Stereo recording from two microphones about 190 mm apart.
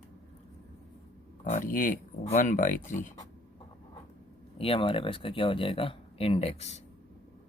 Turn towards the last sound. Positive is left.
turn(degrees=35)  # may be behind; listen again after turning